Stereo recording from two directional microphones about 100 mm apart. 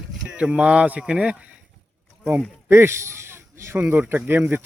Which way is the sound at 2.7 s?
25° right (ahead or behind).